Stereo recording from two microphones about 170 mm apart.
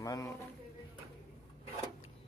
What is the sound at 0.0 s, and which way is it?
Speech, 20° left (ahead or behind).